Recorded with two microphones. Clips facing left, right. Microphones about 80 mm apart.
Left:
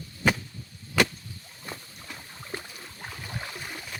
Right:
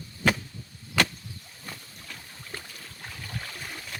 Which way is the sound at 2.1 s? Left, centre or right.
Centre.